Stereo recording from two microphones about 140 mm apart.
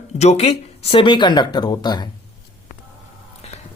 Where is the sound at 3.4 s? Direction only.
50° left (ahead or behind).